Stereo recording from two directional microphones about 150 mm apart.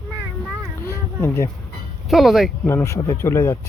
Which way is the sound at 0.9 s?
15° left (ahead or behind).